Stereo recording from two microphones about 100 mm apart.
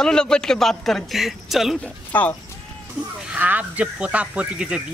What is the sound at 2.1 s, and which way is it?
Speech, 15° left (ahead or behind).